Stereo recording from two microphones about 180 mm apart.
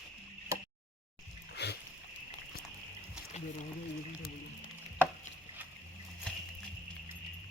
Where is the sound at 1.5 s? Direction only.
70° left (ahead or behind).